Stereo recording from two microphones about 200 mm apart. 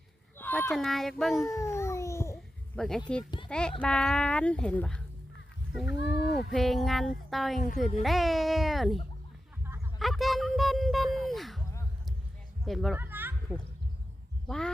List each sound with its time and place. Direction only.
0.3 s speech: 10° left (ahead or behind)
1.5 s babbling: 15° left (ahead or behind)
2.7 s speech: centre (ahead or behind)
5.9 s speech: 60° left (ahead or behind)
6.5 s speech: centre (ahead or behind)
10.0 s a sound: centre (ahead or behind)
12.6 s speech: centre (ahead or behind)
13.0 s a sound: 10° right (ahead or behind)
14.4 s speech: 5° left (ahead or behind)